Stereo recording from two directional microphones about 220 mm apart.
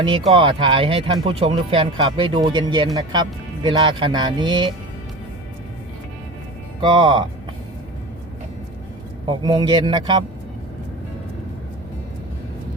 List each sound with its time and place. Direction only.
0.0 s speech: 25° right (ahead or behind)
6.8 s speech: 20° right (ahead or behind)
9.2 s speech: 20° right (ahead or behind)